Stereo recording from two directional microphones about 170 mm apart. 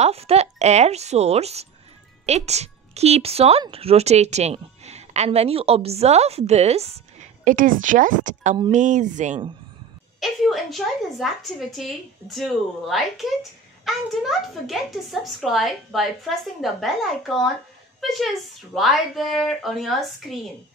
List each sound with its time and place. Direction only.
0.0 s a woman's voice: 35° right (ahead or behind)
7.4 s a woman's voice: 50° right (ahead or behind)
10.2 s a woman's voice: centre (ahead or behind)